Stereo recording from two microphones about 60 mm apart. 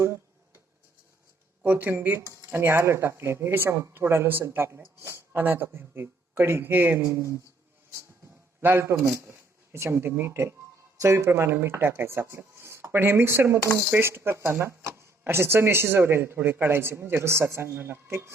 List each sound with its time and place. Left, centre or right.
1.6 s a man's voice: right
7.0 s speech: right
8.8 s a man's voice: right